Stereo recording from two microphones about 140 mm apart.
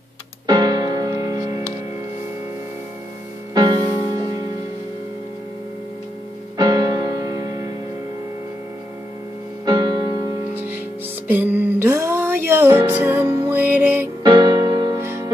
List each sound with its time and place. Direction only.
0.5 s music: 30° right (ahead or behind)
3.5 s music: 30° right (ahead or behind)
6.5 s music: 30° right (ahead or behind)
9.7 s music: 30° right (ahead or behind)
11.2 s music: 10° right (ahead or behind)
14.2 s music: 30° right (ahead or behind)
15.0 s music: 20° right (ahead or behind)